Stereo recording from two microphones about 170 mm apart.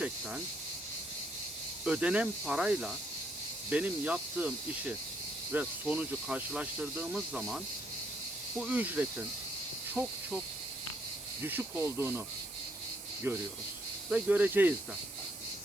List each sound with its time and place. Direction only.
1.8 s speech: 5° right (ahead or behind)
11.4 s speech: 15° right (ahead or behind)
13.3 s speech: 10° right (ahead or behind)